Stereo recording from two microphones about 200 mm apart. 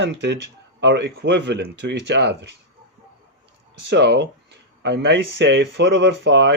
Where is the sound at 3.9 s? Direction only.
60° right (ahead or behind).